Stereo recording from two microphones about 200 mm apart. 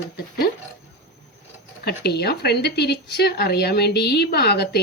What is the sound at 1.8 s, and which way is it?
A woman's voice, 55° left (ahead or behind).